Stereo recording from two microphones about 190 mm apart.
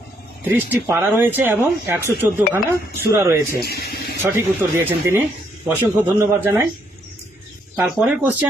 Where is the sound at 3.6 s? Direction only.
55° left (ahead or behind).